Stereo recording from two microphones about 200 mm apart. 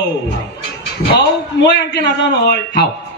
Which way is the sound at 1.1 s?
60° left (ahead or behind).